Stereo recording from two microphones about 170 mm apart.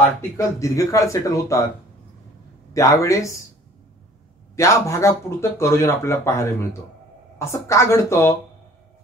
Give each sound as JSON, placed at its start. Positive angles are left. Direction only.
{"t": 0.4, "sound": "speech", "side_deg": 20}
{"t": 2.7, "sound": "speech", "side_deg": 20}
{"t": 4.6, "sound": "speech", "side_deg": 15}